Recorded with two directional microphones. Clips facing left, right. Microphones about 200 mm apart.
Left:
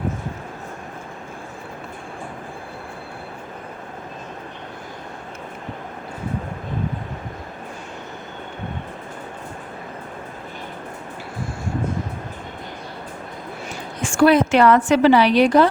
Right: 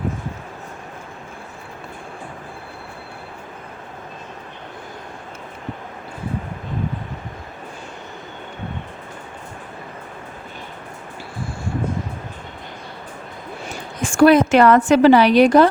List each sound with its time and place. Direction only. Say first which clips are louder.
14.0 s a woman's voice: right 3 dB; 45° right (ahead or behind)